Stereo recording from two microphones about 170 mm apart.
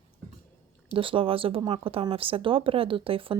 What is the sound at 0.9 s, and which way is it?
Speech, 30° right (ahead or behind).